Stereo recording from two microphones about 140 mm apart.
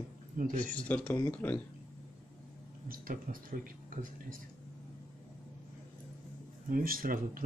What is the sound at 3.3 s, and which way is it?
Speech, 70° right (ahead or behind).